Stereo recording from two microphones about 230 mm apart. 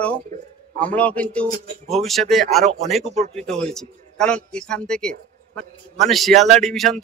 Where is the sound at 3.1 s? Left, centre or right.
Right.